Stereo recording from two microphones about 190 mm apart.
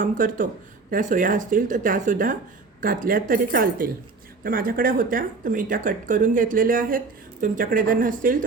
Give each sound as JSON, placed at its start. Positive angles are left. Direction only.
{"t": 0.0, "sound": "speech", "side_deg": -45}